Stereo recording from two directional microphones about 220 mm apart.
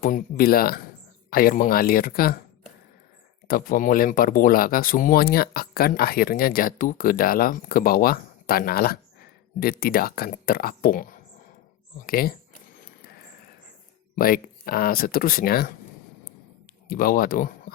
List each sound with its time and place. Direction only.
0.0 s speech: 40° left (ahead or behind)
3.4 s speech: 40° left (ahead or behind)
14.2 s speech: 40° left (ahead or behind)
16.9 s speech: 40° left (ahead or behind)